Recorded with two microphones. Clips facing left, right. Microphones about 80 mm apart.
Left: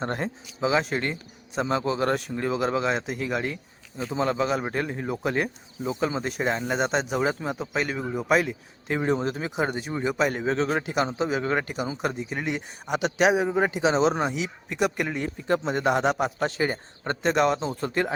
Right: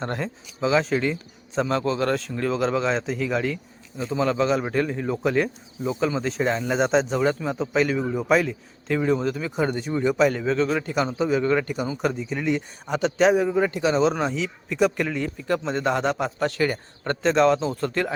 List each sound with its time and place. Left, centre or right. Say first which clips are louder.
0.0 s a man's voice: even; left
0.7 s speech: right 4 dB; centre
1.6 s speech: right 1 dB; centre
8.9 s speech: right 3 dB; left
9.6 s speech: right 4 dB; centre
10.4 s a man's voice: right 2 dB; left
15.1 s a man's voice: right 1 dB; left